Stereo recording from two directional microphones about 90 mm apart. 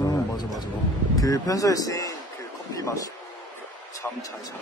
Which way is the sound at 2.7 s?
35° left (ahead or behind).